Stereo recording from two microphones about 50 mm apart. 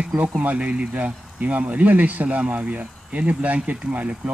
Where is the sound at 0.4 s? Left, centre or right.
Right.